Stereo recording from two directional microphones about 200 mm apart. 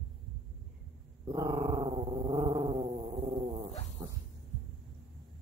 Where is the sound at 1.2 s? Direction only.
20° right (ahead or behind).